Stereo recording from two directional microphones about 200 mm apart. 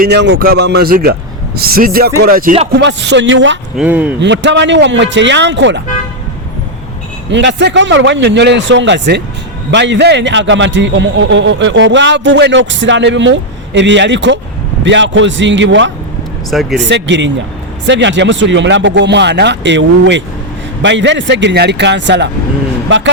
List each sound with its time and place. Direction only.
0.0 s speech: 60° right (ahead or behind)
2.7 s a man's voice: 60° right (ahead or behind)
3.8 s speech: 10° right (ahead or behind)
4.2 s a man's voice: 60° right (ahead or behind)
7.3 s a man's voice: 65° right (ahead or behind)
16.5 s speech: centre (ahead or behind)
16.7 s a man's voice: 60° right (ahead or behind)